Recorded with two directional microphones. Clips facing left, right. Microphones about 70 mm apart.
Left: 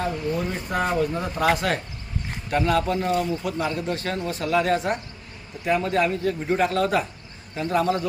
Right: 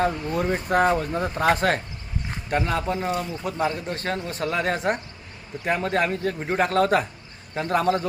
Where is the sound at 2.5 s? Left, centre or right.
Right.